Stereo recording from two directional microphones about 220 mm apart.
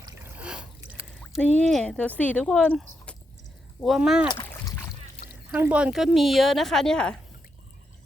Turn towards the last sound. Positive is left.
turn(degrees=5)  # may be behind; listen again after turning